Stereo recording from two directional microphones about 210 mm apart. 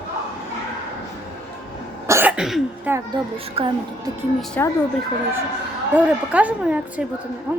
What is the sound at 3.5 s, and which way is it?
Speech, 25° right (ahead or behind).